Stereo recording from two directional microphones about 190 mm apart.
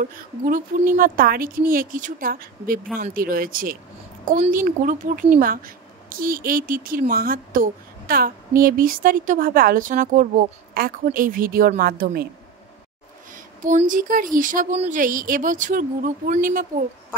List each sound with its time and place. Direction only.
0.0 s speech: 45° right (ahead or behind)
13.3 s speech: 40° right (ahead or behind)